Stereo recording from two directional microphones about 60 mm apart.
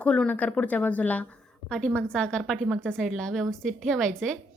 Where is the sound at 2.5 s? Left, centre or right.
Centre.